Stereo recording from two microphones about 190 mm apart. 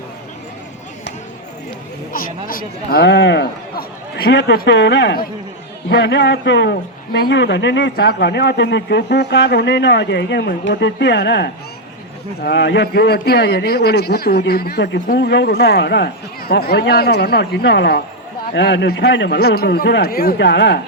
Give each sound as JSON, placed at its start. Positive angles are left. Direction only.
{"t": 2.1, "sound": "a man's voice", "side_deg": 50}